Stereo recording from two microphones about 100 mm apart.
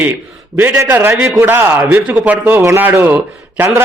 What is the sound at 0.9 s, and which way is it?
A man's voice, 20° right (ahead or behind).